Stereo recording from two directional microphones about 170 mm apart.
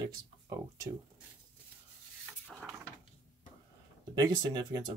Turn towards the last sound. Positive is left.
turn(degrees=-25)  # may be behind; listen again after turning